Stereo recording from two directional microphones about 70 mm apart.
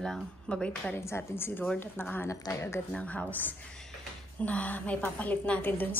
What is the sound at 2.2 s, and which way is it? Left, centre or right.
Speech, left.